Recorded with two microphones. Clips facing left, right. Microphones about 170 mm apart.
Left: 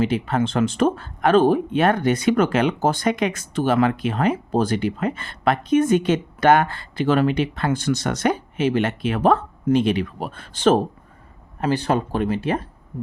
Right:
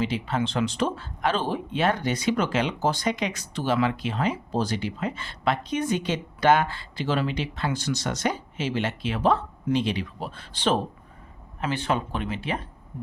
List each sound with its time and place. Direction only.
0.0 s speech: 50° left (ahead or behind)